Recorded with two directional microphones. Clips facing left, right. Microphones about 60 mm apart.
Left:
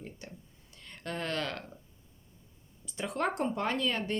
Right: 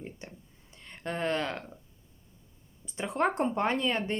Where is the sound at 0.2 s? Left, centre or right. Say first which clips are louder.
Right 1 dB; right.